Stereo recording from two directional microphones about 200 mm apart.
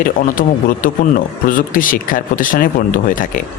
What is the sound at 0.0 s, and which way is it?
Speech, 45° left (ahead or behind).